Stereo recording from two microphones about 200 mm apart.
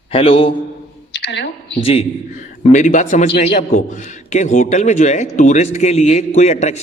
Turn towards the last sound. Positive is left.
turn(degrees=35)  # may be behind; listen again after turning